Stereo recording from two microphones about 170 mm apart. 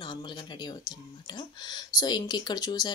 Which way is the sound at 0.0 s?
25° left (ahead or behind).